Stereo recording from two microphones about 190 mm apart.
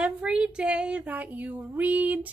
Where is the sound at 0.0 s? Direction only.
5° right (ahead or behind).